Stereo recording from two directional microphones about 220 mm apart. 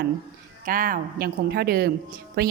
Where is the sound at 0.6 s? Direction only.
40° right (ahead or behind).